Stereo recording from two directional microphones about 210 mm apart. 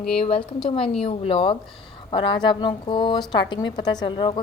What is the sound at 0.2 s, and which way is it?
A woman's voice, 25° left (ahead or behind).